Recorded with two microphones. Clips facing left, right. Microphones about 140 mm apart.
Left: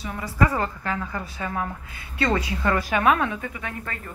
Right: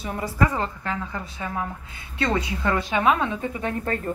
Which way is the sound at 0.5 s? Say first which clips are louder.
Left 1 dB; 20° right (ahead or behind).